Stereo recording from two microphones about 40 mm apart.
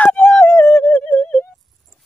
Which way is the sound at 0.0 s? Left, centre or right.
Left.